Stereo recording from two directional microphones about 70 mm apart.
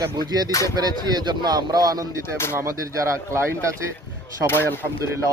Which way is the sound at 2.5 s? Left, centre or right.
Right.